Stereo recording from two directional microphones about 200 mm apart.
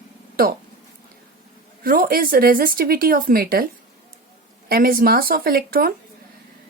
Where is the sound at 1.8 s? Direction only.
45° right (ahead or behind).